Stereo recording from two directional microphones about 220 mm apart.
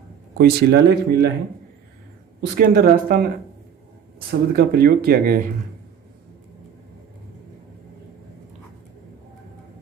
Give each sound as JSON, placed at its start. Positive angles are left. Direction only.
{"t": 0.3, "sound": "speech", "side_deg": -45}
{"t": 2.4, "sound": "speech", "side_deg": -45}
{"t": 4.3, "sound": "speech", "side_deg": -45}